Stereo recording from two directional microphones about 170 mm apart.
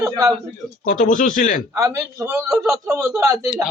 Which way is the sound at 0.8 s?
50° left (ahead or behind).